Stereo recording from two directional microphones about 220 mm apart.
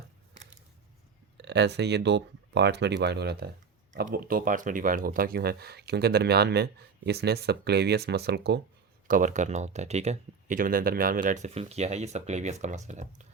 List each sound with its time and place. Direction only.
1.4 s speech: 50° right (ahead or behind)
9.0 s speech: 35° right (ahead or behind)